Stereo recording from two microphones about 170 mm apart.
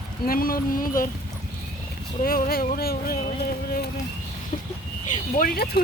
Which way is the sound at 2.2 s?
60° left (ahead or behind).